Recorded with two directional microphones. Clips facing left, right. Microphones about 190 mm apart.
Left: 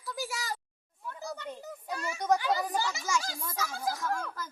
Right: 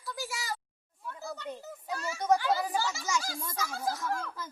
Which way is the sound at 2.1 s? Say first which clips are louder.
Right 1 dB; 5° right (ahead or behind).